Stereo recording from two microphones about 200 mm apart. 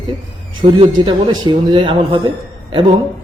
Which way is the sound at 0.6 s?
25° right (ahead or behind).